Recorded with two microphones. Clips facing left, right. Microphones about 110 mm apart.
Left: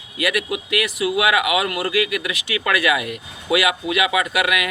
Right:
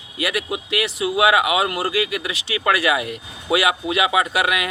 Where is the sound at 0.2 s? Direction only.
30° right (ahead or behind).